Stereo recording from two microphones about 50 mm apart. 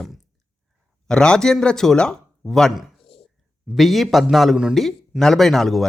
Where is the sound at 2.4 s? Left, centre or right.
Centre.